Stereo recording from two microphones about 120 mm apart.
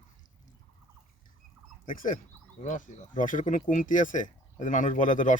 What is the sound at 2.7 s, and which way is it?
Speech, 90° left.